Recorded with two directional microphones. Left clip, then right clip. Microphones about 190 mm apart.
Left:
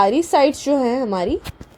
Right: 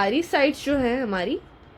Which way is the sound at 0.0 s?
30° left (ahead or behind).